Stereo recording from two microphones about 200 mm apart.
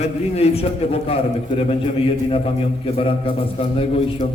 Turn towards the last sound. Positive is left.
turn(degrees=25)  # may be behind; listen again after turning